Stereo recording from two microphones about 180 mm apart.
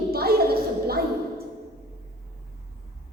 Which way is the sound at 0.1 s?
60° right (ahead or behind).